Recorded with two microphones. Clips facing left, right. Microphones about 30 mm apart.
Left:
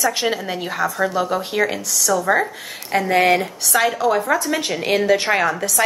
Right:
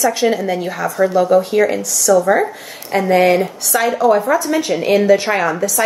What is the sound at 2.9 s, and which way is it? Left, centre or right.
Speech, left.